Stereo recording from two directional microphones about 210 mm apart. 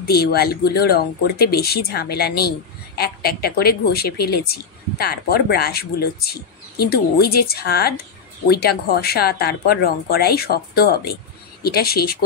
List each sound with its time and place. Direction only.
0.0 s a woman's voice: 50° left (ahead or behind)